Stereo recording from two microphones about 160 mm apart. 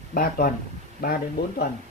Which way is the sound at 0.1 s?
65° left (ahead or behind).